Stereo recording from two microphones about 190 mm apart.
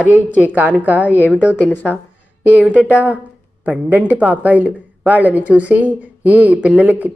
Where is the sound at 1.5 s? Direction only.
10° left (ahead or behind).